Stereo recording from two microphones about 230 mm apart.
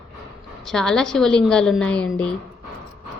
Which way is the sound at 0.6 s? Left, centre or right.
Centre.